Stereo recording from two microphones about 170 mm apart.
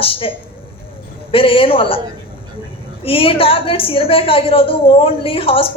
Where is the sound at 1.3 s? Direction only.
30° left (ahead or behind).